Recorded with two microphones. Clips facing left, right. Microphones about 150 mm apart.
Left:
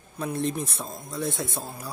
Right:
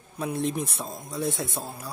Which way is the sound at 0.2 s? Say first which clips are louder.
Even; 10° right (ahead or behind).